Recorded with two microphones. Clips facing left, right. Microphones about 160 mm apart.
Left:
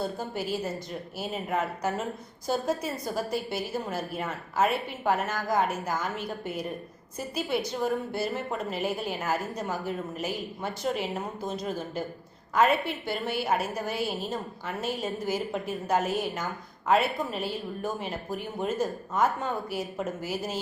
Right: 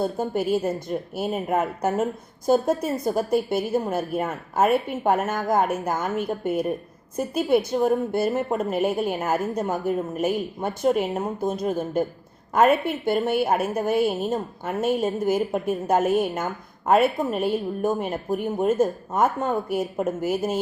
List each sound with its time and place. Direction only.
0.0 s a woman's voice: 50° right (ahead or behind)